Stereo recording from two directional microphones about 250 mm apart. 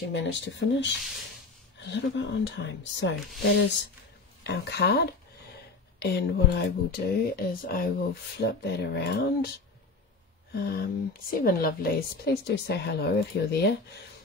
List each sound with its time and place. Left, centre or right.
0.1 s speech: left
4.4 s speech: left
10.5 s speech: left